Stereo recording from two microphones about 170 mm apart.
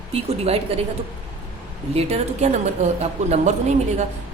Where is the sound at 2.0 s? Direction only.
40° right (ahead or behind).